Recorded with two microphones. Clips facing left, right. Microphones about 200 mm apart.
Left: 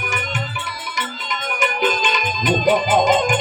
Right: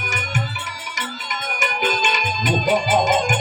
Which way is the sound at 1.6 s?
45° right (ahead or behind).